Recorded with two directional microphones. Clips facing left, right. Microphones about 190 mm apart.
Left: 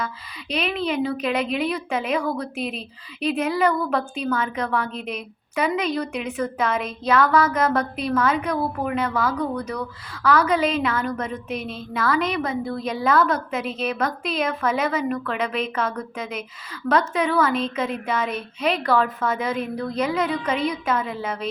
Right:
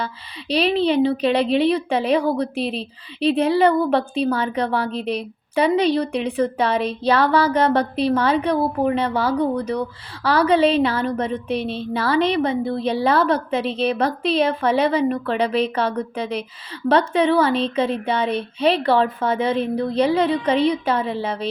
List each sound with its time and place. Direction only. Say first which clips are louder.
0.0 s speech: right 2 dB; 35° right (ahead or behind)